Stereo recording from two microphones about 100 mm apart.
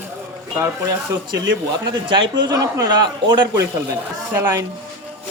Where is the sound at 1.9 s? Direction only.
50° right (ahead or behind).